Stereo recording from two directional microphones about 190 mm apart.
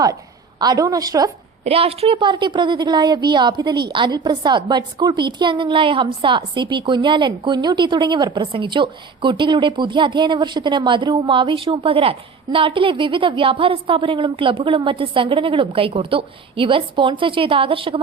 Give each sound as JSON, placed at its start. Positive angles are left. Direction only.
{"t": 0.6, "sound": "a woman's voice", "side_deg": -20}
{"t": 1.6, "sound": "a woman's voice", "side_deg": -30}